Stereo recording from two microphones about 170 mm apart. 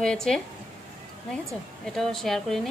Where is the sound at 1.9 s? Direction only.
Centre (ahead or behind).